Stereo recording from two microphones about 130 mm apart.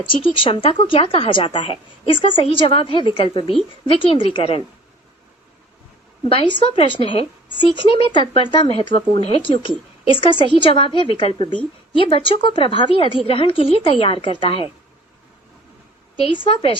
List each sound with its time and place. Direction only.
0.1 s speech: 40° left (ahead or behind)
6.2 s a woman's voice: 45° left (ahead or behind)
16.2 s a woman's voice: 40° left (ahead or behind)